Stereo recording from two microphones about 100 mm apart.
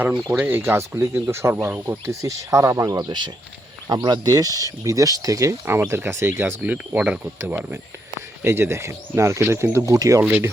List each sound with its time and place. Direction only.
0.3 s speech: 20° right (ahead or behind)
3.1 s speech: 50° right (ahead or behind)
10.2 s speech: 20° right (ahead or behind)